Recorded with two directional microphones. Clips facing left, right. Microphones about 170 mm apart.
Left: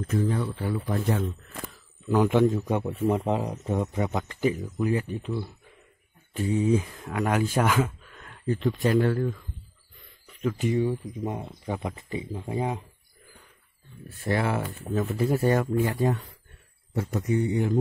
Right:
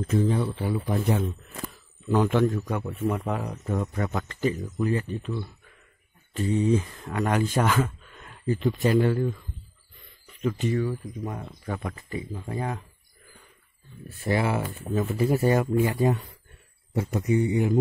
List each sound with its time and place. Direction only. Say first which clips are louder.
0.0 s speech: right 2 dB; 25° right (ahead or behind)
2.0 s a man's voice: left 1 dB; 10° left (ahead or behind); by 9.4 s 5° right (ahead or behind)
10.2 s a sound: right 1 dB; centre (ahead or behind)
10.6 s speech: left 4 dB; 20° left (ahead or behind)
14.2 s speech: right 1 dB; 5° right (ahead or behind)